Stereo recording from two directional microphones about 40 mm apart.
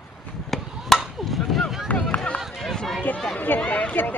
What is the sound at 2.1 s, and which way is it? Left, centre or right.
Run, left.